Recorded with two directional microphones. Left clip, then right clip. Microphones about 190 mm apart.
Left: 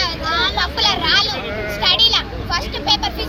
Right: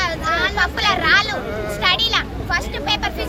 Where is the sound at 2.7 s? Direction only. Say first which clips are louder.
Left 3 dB; 5° right (ahead or behind).